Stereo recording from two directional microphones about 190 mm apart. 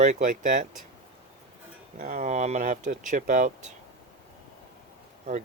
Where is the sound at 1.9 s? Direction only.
35° right (ahead or behind).